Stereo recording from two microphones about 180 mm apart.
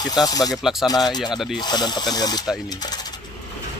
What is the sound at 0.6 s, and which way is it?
Speech, centre (ahead or behind).